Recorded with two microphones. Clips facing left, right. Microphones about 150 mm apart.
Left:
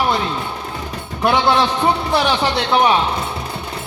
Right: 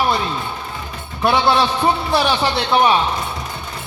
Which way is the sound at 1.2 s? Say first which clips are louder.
Even; 15° left (ahead or behind).